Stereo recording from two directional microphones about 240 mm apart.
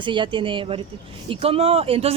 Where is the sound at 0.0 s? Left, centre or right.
Centre.